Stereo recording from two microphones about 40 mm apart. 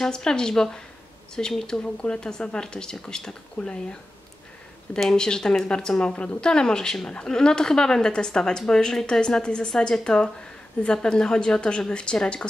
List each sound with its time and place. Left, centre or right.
0.0 s a woman's voice: centre
5.1 s a woman's voice: centre